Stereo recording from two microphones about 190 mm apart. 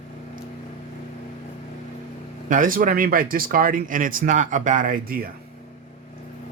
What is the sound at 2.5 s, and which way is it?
Speech, 45° right (ahead or behind).